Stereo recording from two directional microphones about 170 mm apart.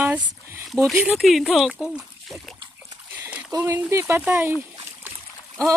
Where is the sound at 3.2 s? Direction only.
10° right (ahead or behind).